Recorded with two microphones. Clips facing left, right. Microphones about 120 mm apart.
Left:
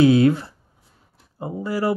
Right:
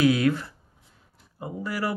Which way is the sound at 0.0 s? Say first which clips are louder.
Left 6 dB; 30° left (ahead or behind).